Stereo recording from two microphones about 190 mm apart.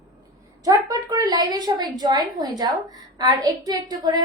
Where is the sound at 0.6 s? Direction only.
20° right (ahead or behind).